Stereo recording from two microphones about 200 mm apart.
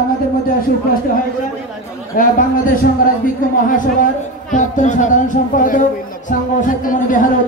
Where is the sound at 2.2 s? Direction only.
45° left (ahead or behind).